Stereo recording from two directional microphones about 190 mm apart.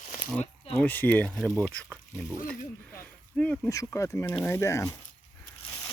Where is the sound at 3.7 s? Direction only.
15° left (ahead or behind).